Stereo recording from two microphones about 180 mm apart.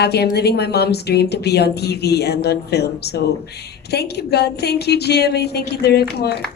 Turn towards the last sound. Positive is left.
turn(degrees=65)  # may be behind; listen again after turning